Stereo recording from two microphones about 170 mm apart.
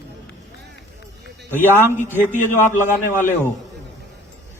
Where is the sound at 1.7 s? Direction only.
15° left (ahead or behind).